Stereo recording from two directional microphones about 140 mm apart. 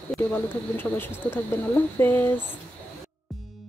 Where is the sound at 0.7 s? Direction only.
15° left (ahead or behind).